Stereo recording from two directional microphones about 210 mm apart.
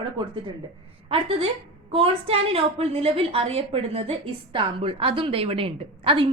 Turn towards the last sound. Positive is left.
turn(degrees=-25)  # may be behind; listen again after turning